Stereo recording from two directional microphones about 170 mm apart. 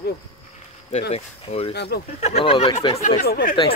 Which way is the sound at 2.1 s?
40° left (ahead or behind).